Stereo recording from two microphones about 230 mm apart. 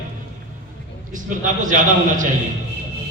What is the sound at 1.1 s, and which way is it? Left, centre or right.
A man's voice, right.